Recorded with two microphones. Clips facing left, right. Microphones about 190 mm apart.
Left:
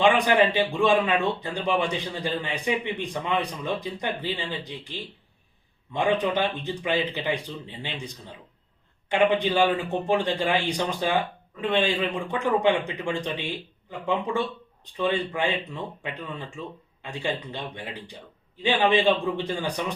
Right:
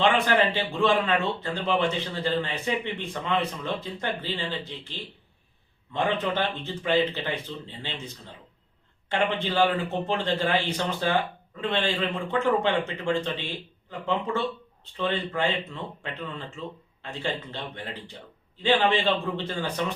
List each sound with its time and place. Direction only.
0.0 s a man's voice: 15° left (ahead or behind)